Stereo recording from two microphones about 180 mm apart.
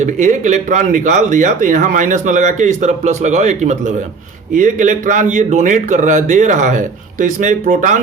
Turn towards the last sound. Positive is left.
turn(degrees=-45)  # may be behind; listen again after turning